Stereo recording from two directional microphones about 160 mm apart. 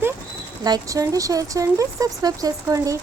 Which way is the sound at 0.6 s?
25° right (ahead or behind).